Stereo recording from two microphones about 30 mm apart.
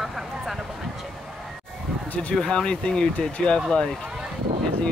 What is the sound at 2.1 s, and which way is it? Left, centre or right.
Speech, left.